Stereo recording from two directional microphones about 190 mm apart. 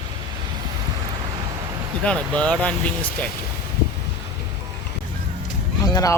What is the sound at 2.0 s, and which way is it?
Speech, 5° left (ahead or behind).